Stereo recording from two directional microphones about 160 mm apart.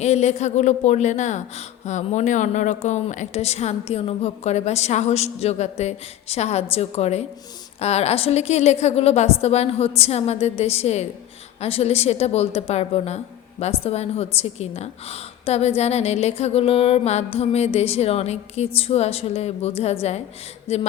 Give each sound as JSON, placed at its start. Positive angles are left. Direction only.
{"t": 0.0, "sound": "a woman's voice", "side_deg": 45}